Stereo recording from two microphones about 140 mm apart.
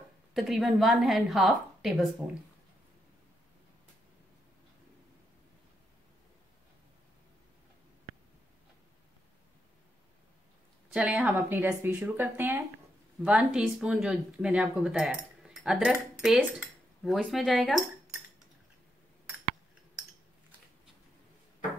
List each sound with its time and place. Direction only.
0.3 s speech: centre (ahead or behind)
10.9 s a woman's voice: 10° right (ahead or behind)